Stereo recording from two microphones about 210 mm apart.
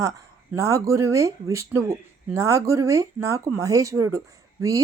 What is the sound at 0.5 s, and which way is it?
Speech, 15° right (ahead or behind).